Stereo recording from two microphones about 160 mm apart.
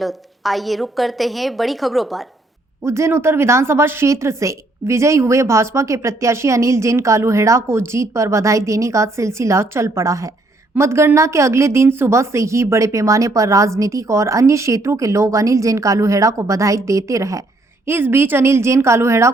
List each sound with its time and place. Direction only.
0.0 s a woman's voice: centre (ahead or behind)
2.8 s a woman's voice: 15° right (ahead or behind)